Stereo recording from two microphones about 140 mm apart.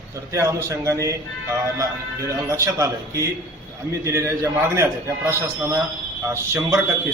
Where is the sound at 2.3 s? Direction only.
20° right (ahead or behind).